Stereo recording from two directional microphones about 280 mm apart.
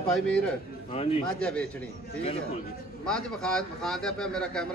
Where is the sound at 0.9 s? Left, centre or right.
Left.